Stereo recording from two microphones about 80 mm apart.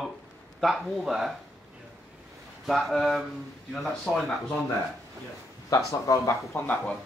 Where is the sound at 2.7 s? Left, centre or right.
Centre.